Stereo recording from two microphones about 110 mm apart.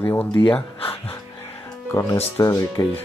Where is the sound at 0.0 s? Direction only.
20° left (ahead or behind).